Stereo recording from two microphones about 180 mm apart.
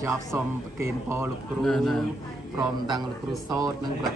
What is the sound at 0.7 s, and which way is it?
Speech, 15° right (ahead or behind).